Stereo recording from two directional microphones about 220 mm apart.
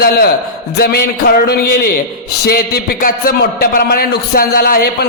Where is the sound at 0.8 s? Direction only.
45° left (ahead or behind).